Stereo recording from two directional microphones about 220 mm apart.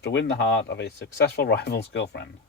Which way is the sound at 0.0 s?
55° left (ahead or behind).